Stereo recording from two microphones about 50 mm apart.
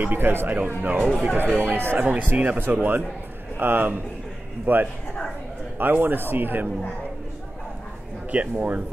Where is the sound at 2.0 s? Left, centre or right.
Right.